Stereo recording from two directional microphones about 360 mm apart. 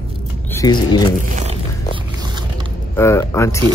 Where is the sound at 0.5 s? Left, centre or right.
Centre.